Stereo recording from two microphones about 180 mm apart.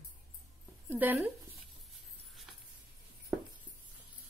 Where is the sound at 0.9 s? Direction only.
10° right (ahead or behind).